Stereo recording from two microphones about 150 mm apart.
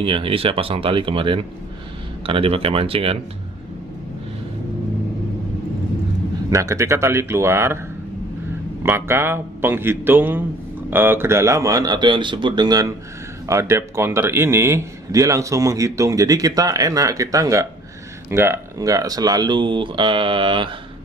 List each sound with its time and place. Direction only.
0.0 s speech: 35° right (ahead or behind)
6.5 s speech: 20° right (ahead or behind)
8.8 s a man's voice: 15° right (ahead or behind); by 20.7 s 35° right (ahead or behind)